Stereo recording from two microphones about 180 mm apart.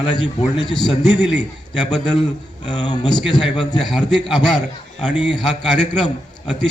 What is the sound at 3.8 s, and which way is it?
Speech, centre (ahead or behind).